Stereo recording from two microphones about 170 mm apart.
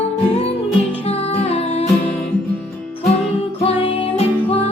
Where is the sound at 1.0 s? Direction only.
35° left (ahead or behind).